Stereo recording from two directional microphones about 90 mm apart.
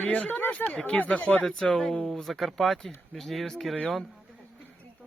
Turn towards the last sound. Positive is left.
turn(degrees=0)  # may be behind; listen again after turning